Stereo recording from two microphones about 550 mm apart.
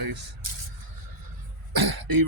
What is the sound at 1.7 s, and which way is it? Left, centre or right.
Cough, right.